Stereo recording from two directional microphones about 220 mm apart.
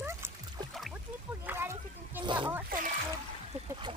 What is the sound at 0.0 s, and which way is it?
Music, 10° right (ahead or behind).